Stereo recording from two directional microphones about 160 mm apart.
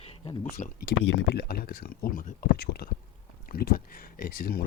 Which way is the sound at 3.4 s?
65° left (ahead or behind).